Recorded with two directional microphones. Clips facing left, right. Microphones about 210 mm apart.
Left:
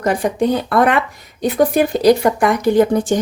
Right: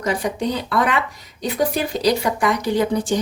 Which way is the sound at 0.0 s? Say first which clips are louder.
Left 5 dB; 50° left (ahead or behind).